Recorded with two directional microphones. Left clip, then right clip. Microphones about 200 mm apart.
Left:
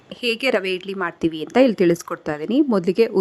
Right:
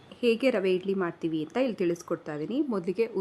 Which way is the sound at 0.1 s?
35° left (ahead or behind).